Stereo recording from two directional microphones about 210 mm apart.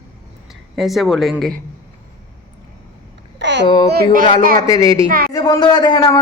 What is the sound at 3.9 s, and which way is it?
Speech, 40° right (ahead or behind).